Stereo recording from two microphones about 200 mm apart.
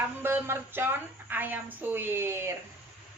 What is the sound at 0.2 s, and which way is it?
A woman's voice, 10° right (ahead or behind).